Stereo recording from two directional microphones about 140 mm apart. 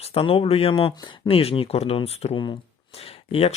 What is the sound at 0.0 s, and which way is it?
Speech, 45° left (ahead or behind).